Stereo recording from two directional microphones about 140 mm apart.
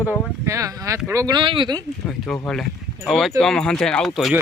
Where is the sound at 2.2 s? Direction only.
5° left (ahead or behind).